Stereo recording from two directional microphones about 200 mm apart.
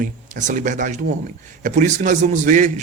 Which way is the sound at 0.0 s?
40° right (ahead or behind).